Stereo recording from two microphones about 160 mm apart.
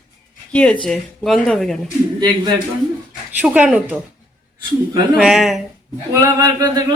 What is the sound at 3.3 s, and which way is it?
Speech, 10° right (ahead or behind).